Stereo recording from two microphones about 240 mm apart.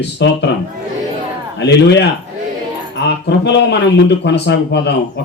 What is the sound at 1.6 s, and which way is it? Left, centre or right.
Speech, left.